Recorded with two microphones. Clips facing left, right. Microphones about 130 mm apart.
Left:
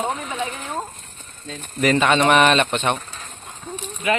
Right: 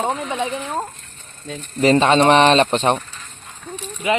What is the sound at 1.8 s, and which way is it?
Speech, 30° right (ahead or behind).